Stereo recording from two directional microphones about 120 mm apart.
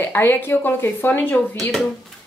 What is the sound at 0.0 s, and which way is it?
Speech, 15° left (ahead or behind).